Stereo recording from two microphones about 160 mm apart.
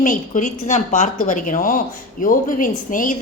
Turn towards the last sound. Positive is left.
turn(degrees=55)  # may be behind; listen again after turning